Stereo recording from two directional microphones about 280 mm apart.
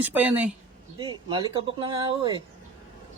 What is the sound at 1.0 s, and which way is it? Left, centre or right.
Speech, centre.